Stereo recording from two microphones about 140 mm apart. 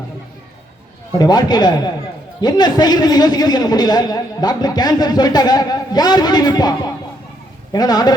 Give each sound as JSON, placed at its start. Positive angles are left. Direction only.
{"t": 1.2, "sound": "a man's voice", "side_deg": 30}